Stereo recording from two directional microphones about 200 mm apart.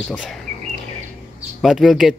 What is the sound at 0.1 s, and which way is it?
Speech, 5° left (ahead or behind).